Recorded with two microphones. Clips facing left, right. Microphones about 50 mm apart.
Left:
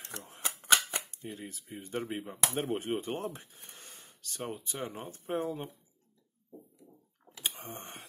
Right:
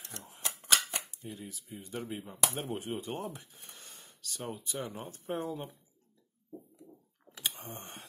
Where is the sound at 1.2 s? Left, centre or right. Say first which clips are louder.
Left 2 dB; left.